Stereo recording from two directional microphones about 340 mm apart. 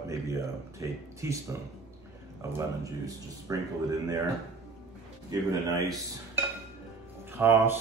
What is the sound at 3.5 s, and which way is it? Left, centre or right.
Speech, centre.